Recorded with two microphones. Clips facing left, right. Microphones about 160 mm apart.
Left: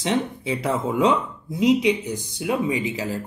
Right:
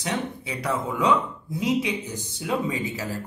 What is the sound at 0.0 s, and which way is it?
Speech, 25° left (ahead or behind).